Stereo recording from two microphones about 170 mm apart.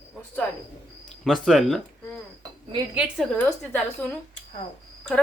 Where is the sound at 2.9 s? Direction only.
Centre (ahead or behind).